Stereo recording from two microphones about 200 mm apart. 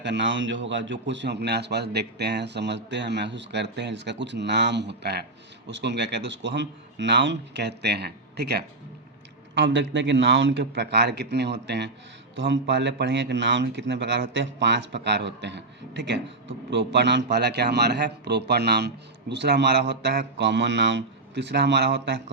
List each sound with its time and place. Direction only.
0.0 s a man's voice: 60° right (ahead or behind)
9.6 s a man's voice: 65° right (ahead or behind)